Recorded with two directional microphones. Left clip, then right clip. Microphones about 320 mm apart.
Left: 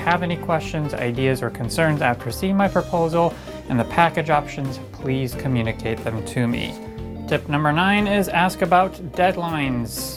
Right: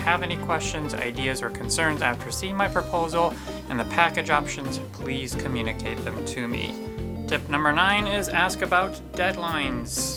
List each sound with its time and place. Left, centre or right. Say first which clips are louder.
0.0 s speech: left 3 dB; left
3.8 s speech: left 4 dB; left
7.3 s speech: left 2 dB; left